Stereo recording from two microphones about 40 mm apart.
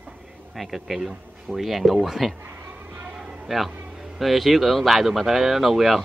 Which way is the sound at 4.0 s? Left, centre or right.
Centre.